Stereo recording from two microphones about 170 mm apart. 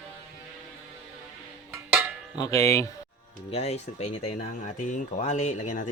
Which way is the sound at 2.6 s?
15° left (ahead or behind).